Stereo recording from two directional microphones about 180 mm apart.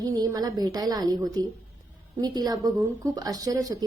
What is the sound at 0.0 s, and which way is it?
A woman's voice, 20° right (ahead or behind).